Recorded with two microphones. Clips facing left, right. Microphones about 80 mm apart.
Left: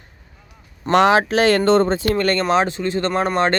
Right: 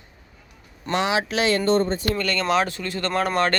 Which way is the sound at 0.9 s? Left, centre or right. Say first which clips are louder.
Left 9 dB; left.